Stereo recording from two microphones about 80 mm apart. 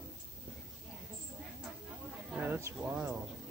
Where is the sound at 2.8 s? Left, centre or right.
Centre.